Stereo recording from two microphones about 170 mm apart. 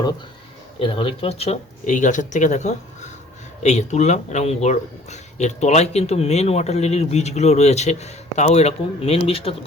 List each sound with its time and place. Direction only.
0.8 s speech: 30° left (ahead or behind)